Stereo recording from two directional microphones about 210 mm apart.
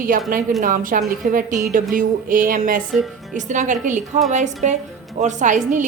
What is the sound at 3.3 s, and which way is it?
A woman's voice, 35° right (ahead or behind).